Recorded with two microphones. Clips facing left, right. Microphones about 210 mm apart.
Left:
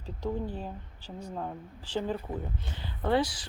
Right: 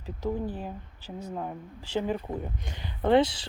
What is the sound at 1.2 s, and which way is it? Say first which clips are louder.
Speech: right 2 dB; 10° right (ahead or behind).